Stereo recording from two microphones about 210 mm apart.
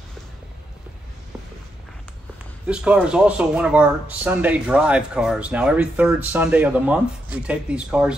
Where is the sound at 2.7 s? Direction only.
5° right (ahead or behind).